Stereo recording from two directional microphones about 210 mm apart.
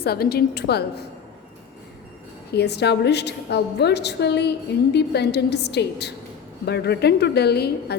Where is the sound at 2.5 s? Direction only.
50° left (ahead or behind).